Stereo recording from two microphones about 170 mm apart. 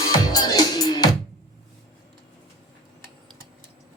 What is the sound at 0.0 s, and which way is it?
Music, 20° left (ahead or behind).